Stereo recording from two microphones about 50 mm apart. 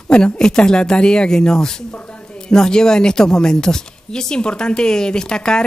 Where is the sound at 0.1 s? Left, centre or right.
Centre.